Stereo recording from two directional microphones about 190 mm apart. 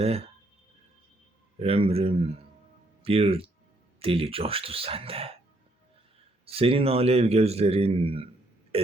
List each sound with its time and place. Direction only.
0.0 s a man's voice: 30° right (ahead or behind)
1.5 s a man's voice: 30° right (ahead or behind)
6.4 s a man's voice: 30° right (ahead or behind)
8.7 s a sound: 30° right (ahead or behind)